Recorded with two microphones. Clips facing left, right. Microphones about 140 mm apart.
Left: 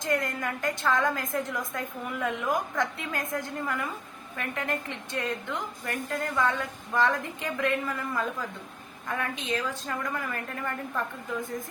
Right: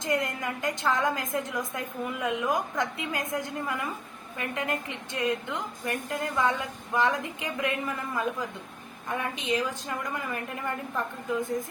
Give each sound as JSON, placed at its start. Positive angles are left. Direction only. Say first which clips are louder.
{"t": 0.0, "sound": "a woman's voice", "louder": "even", "side_deg": -20}